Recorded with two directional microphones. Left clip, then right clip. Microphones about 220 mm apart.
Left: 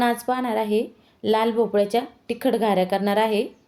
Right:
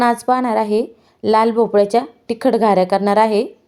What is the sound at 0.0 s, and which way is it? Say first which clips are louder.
A woman's voice: right 7 dB; 20° right (ahead or behind).